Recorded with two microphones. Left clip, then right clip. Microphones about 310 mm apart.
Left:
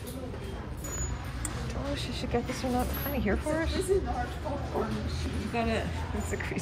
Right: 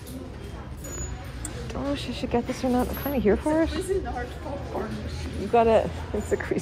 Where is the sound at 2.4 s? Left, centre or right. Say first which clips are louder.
Right 5 dB; centre.